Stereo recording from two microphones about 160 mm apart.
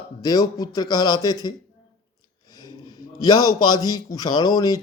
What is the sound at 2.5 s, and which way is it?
A man's voice, 25° left (ahead or behind).